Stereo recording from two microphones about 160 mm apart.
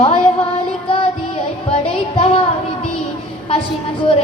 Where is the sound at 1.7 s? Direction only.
35° left (ahead or behind).